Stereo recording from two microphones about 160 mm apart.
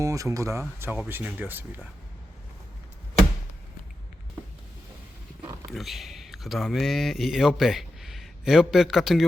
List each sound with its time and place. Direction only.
0.0 s speech: 20° right (ahead or behind)
5.7 s speech: centre (ahead or behind)